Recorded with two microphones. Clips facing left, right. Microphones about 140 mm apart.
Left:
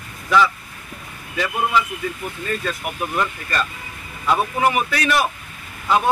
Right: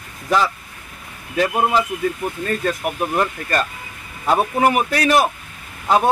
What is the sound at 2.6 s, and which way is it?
Speech, 45° right (ahead or behind).